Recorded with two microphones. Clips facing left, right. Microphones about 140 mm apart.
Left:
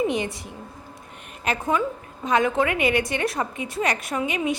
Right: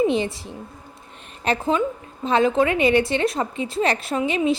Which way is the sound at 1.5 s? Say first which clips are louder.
Right 3 dB; 25° right (ahead or behind).